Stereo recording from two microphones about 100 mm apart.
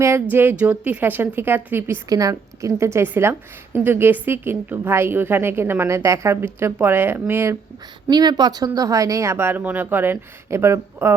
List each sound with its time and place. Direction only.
0.0 s speech: 25° right (ahead or behind)
2.0 s a woman's voice: 35° right (ahead or behind)
8.1 s speech: 45° right (ahead or behind); by 11.1 s 25° right (ahead or behind)